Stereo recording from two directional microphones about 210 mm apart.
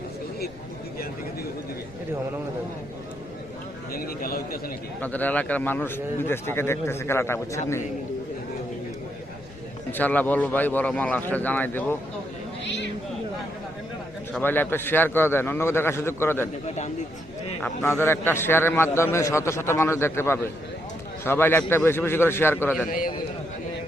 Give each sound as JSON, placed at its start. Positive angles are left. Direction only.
{"t": 3.9, "sound": "a man's voice", "side_deg": 45}
{"t": 4.9, "sound": "a man's voice", "side_deg": 10}
{"t": 9.9, "sound": "a man's voice", "side_deg": 10}
{"t": 12.6, "sound": "a sound", "side_deg": 55}
{"t": 14.3, "sound": "a man's voice", "side_deg": 10}
{"t": 16.6, "sound": "a man's voice", "side_deg": 35}
{"t": 18.0, "sound": "a man's voice", "side_deg": 10}
{"t": 22.9, "sound": "a man's voice", "side_deg": 40}